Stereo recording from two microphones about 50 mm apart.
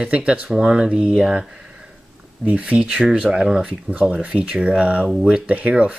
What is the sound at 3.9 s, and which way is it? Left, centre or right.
Speech, right.